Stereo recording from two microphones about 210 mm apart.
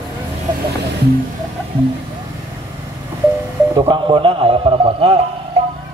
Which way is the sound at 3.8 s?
25° right (ahead or behind).